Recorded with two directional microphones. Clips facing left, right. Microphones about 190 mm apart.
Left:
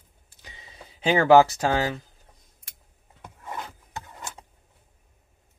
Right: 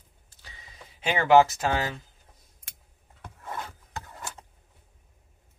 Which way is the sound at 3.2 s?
15° left (ahead or behind).